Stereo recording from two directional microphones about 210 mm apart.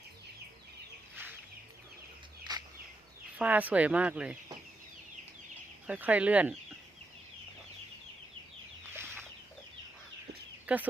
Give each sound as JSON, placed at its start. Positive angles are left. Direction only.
{"t": 2.5, "sound": "a sound", "side_deg": -20}
{"t": 3.3, "sound": "speech", "side_deg": -5}
{"t": 5.9, "sound": "speech", "side_deg": -5}
{"t": 10.7, "sound": "speech", "side_deg": -5}